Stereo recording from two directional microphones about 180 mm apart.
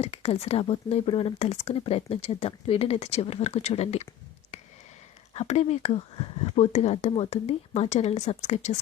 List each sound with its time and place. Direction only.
0.0 s speech: 35° left (ahead or behind)
5.3 s speech: 35° left (ahead or behind)